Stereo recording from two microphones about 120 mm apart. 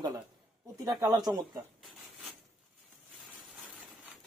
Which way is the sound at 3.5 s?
10° right (ahead or behind).